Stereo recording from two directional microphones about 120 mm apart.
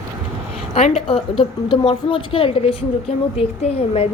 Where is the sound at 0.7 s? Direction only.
55° left (ahead or behind).